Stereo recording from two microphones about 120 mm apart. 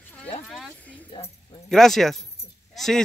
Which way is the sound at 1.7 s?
5° left (ahead or behind).